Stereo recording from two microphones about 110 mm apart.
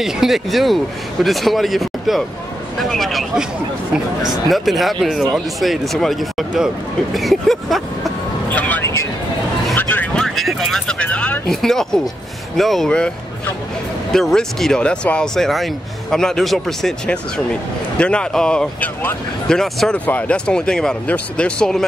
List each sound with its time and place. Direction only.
0.0 s speech: 5° right (ahead or behind)
8.5 s vehicle: 15° left (ahead or behind)
10.2 s speech: centre (ahead or behind)
11.4 s speech: 5° left (ahead or behind)
14.1 s speech: 5° left (ahead or behind)